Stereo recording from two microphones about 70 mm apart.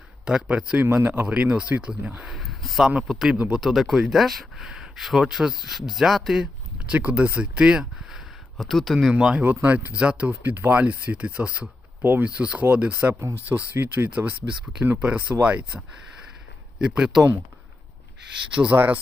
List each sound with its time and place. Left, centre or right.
0.3 s speech: centre
0.9 s speech: right
1.3 s speech: centre
2.3 s a sound: centre
3.1 s speech: centre
6.9 s speech: centre
9.1 s speech: centre
9.4 s speech: right; by 17.2 s centre
18.5 s speech: centre